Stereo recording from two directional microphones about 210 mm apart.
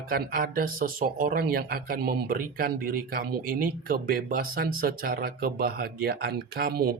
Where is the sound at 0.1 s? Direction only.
45° right (ahead or behind).